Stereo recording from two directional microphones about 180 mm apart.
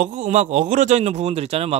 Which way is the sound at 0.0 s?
40° right (ahead or behind).